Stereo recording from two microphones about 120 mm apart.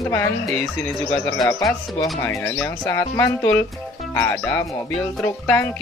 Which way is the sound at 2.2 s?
20° left (ahead or behind).